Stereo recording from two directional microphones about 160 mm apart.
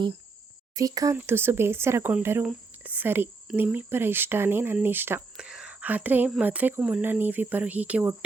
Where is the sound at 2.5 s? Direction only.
10° right (ahead or behind).